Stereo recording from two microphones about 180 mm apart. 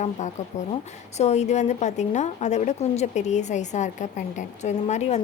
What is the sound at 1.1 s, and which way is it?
A woman's voice, 40° left (ahead or behind).